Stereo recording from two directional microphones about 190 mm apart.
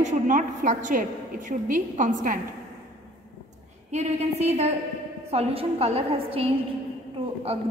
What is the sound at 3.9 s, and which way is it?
A woman's voice, 35° right (ahead or behind).